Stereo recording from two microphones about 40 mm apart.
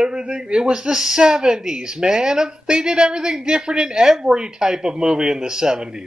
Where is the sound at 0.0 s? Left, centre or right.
Right.